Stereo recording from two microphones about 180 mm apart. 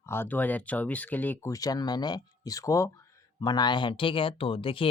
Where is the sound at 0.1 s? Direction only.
10° left (ahead or behind).